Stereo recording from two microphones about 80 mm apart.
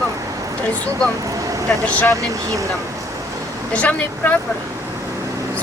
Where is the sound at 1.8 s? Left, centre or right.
Centre.